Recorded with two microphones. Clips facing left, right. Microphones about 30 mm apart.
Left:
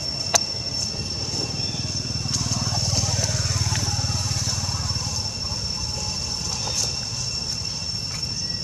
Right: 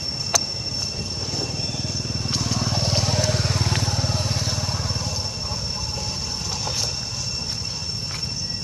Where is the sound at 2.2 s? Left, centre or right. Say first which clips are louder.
Right 3 dB; right.